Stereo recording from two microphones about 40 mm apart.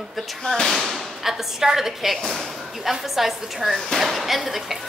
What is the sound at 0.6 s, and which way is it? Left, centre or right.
Speech, centre.